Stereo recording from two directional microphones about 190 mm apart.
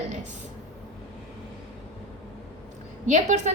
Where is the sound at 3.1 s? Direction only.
40° right (ahead or behind).